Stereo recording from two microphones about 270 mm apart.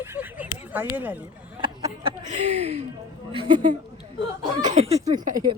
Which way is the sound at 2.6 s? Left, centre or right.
Right.